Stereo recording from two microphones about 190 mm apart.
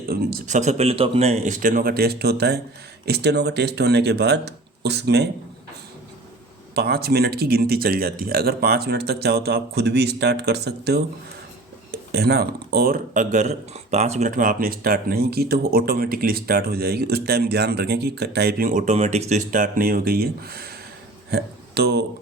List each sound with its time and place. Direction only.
0.1 s speech: 50° right (ahead or behind)
6.7 s speech: 55° right (ahead or behind)
21.2 s a sound: 55° right (ahead or behind)